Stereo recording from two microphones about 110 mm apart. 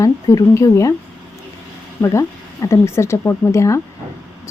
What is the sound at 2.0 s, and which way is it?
Speech, 25° left (ahead or behind).